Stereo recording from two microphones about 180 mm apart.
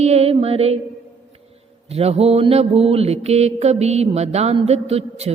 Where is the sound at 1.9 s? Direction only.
35° right (ahead or behind).